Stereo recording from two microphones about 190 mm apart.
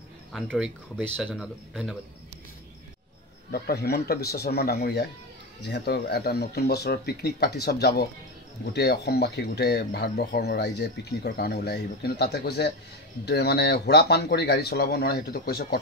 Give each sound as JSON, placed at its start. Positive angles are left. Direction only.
{"t": 0.3, "sound": "speech", "side_deg": 0}
{"t": 3.5, "sound": "speech", "side_deg": 55}